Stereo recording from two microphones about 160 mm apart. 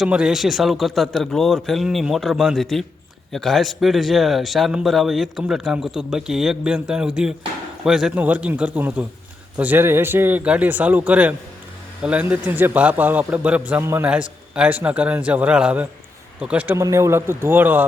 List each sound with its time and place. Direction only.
0.0 s a man's voice: 5° right (ahead or behind)